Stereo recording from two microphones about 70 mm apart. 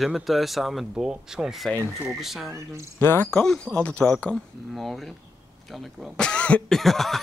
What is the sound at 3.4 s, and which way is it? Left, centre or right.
Speech, centre.